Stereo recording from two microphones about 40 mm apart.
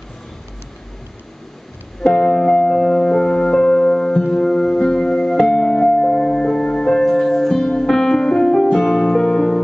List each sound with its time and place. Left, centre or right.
2.0 s music: left